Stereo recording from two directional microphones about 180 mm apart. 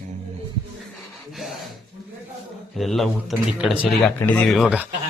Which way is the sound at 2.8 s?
Centre (ahead or behind).